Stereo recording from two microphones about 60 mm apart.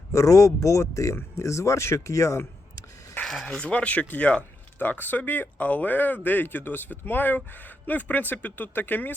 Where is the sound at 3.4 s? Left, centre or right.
Centre.